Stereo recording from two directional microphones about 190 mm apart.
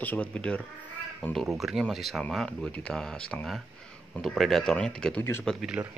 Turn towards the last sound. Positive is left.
turn(degrees=-5)  # may be behind; listen again after turning